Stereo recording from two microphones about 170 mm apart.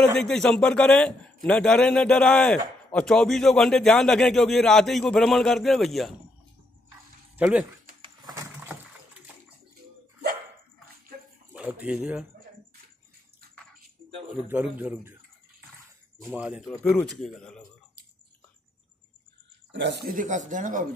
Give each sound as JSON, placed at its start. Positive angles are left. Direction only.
{"t": 0.0, "sound": "a man's voice", "side_deg": 5}
{"t": 7.3, "sound": "speech", "side_deg": -10}
{"t": 8.0, "sound": "a sound", "side_deg": -25}
{"t": 11.5, "sound": "speech", "side_deg": -10}
{"t": 14.5, "sound": "a man's voice", "side_deg": -10}
{"t": 16.3, "sound": "a man's voice", "side_deg": -10}
{"t": 19.7, "sound": "speech", "side_deg": -90}
{"t": 20.1, "sound": "speech", "side_deg": -50}